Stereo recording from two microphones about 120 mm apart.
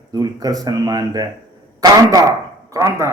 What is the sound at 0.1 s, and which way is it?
Speech, 35° right (ahead or behind).